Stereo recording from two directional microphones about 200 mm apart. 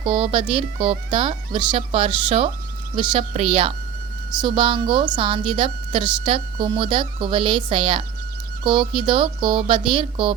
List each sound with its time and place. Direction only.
0.0 s a woman's voice: 30° right (ahead or behind)